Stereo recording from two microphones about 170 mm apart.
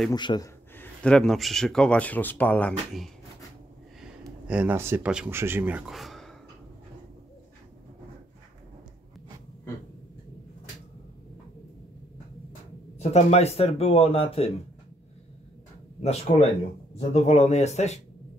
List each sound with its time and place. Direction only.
0.1 s speech: 25° left (ahead or behind)
0.7 s speech: 5° left (ahead or behind)
4.5 s speech: 10° right (ahead or behind)
12.9 s speech: 40° left (ahead or behind)
16.0 s speech: 40° left (ahead or behind)